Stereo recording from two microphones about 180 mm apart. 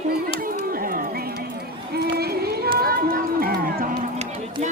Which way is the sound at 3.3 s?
55° right (ahead or behind).